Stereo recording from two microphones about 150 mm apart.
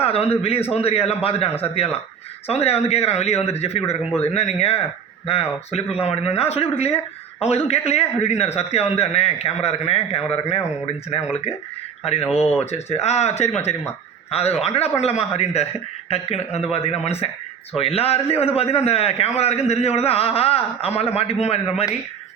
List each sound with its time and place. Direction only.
0.0 s a man's voice: 40° left (ahead or behind)
12.7 s a man's voice: 45° left (ahead or behind)